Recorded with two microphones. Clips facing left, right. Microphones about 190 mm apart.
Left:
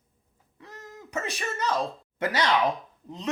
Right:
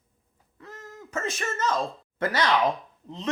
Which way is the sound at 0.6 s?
15° left (ahead or behind).